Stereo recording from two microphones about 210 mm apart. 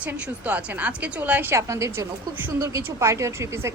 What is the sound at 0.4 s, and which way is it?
A woman's voice, 5° right (ahead or behind).